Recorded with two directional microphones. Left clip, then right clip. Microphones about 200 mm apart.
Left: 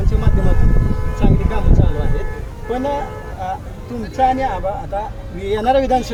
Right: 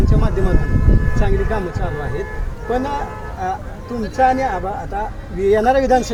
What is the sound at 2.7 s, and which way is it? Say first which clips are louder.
Speech: even; 30° right (ahead or behind).